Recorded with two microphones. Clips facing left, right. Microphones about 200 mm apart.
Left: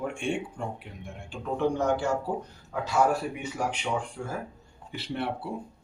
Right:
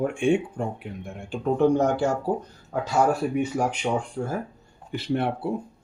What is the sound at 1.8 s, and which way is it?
Speech, 40° right (ahead or behind).